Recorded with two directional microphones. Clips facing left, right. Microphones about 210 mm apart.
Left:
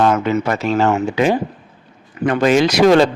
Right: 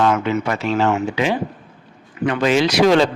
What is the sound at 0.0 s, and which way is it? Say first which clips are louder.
Speech: left 2 dB; 40° left (ahead or behind).